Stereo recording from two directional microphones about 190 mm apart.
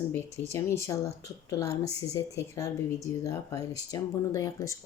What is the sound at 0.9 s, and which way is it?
Speech, 15° left (ahead or behind).